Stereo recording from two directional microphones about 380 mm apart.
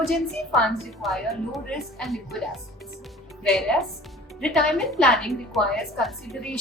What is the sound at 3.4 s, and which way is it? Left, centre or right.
Speech, centre.